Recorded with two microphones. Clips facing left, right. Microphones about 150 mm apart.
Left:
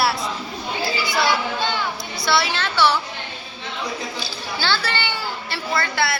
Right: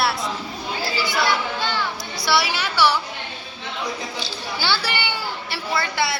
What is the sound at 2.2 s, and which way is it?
Speech, 10° right (ahead or behind).